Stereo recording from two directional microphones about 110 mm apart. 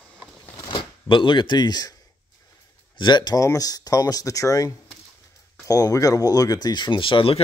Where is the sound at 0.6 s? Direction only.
50° left (ahead or behind).